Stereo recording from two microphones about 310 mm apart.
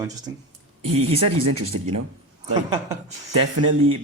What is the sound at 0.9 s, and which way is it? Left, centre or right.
Speech, right.